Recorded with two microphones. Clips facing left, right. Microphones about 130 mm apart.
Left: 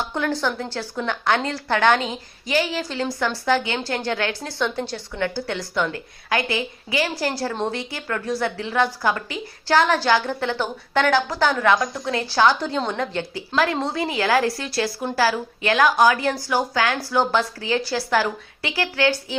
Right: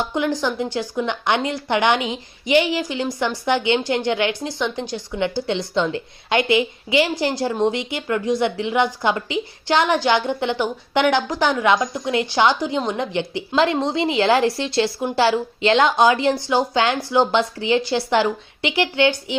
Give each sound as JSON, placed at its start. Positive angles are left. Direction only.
{"t": 0.0, "sound": "a woman's voice", "side_deg": -15}